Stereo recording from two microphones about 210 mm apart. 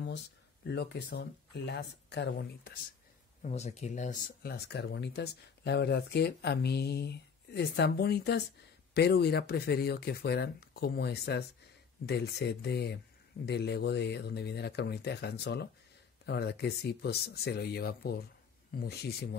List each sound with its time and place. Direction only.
0.7 s speech: 55° left (ahead or behind)
3.4 s speech: 30° left (ahead or behind)
4.4 s speech: 50° left (ahead or behind)